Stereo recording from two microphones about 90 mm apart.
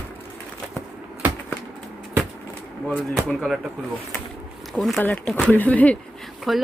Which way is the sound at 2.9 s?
5° left (ahead or behind).